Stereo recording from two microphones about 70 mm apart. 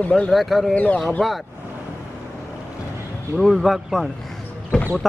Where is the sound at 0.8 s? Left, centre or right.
Left.